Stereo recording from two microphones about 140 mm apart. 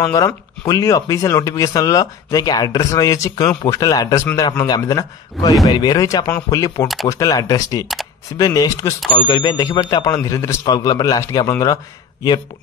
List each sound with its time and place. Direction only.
0.0 s speech: 25° left (ahead or behind)